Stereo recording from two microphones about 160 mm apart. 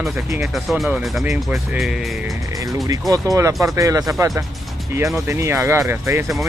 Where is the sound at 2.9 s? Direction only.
25° right (ahead or behind).